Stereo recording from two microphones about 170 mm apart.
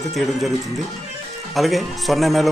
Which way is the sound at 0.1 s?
Centre (ahead or behind).